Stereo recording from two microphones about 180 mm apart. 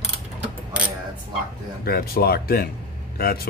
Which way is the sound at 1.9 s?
55° left (ahead or behind).